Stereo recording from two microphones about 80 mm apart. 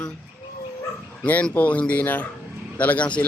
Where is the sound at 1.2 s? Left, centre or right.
Centre.